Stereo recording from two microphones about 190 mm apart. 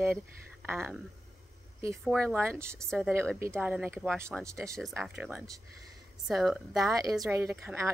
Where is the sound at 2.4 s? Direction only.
15° right (ahead or behind).